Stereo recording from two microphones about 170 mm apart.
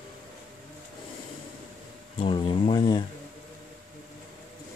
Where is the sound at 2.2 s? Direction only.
30° left (ahead or behind).